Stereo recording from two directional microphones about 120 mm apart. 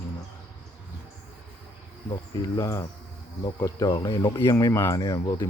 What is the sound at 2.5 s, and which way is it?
Speech, 25° left (ahead or behind).